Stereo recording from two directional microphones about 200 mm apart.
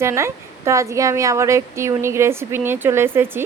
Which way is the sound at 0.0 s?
15° right (ahead or behind).